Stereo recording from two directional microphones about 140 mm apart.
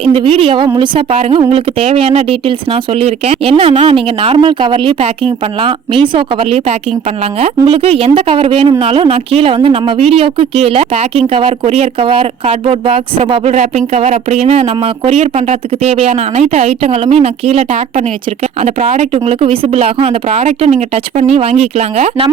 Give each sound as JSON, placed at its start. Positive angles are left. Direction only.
{"t": 0.0, "sound": "a woman's voice", "side_deg": -40}
{"t": 13.5, "sound": "speech", "side_deg": -55}